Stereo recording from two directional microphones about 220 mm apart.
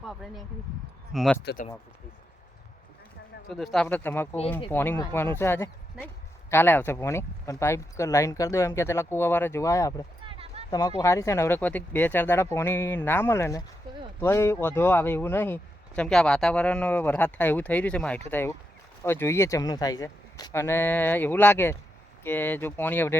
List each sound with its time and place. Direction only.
0.0 s speech: centre (ahead or behind)
3.5 s speech: centre (ahead or behind)
10.2 s clip-clop: 25° right (ahead or behind)
10.7 s speech: 15° left (ahead or behind)